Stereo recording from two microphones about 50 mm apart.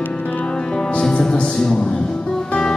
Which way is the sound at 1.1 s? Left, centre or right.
Centre.